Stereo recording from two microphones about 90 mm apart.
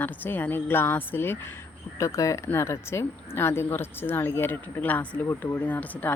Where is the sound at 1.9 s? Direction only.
35° left (ahead or behind).